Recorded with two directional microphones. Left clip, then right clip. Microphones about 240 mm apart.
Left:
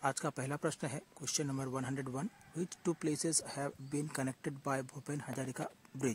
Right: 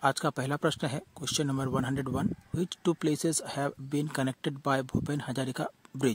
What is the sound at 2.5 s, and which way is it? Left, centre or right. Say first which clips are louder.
Speech: right 7 dB; right.